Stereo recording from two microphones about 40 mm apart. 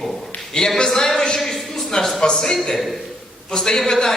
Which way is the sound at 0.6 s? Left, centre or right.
Left.